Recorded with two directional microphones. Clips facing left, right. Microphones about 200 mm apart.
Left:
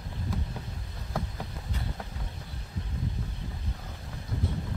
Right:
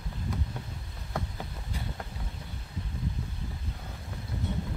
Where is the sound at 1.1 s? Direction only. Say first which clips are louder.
Left 1 dB; centre (ahead or behind).